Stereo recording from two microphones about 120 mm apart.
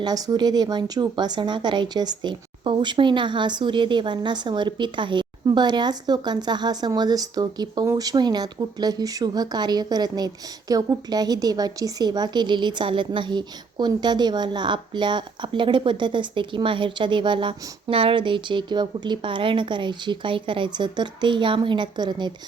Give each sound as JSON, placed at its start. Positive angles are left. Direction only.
{"t": 0.0, "sound": "a woman's voice", "side_deg": -35}